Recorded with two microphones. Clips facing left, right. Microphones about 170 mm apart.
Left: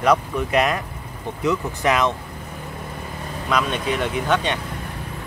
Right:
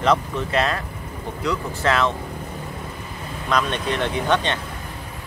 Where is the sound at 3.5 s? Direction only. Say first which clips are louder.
Even; 5° left (ahead or behind).